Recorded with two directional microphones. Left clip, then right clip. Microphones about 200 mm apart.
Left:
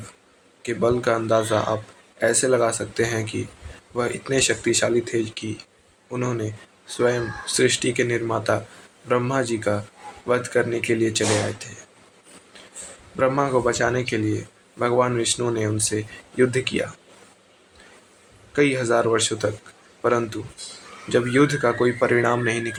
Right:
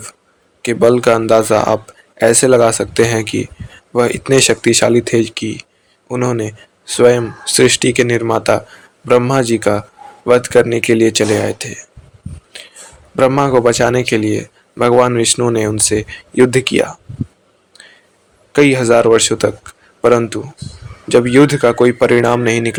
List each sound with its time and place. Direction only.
0.6 s speech: 50° right (ahead or behind)
13.1 s speech: 50° right (ahead or behind)
18.5 s speech: 50° right (ahead or behind)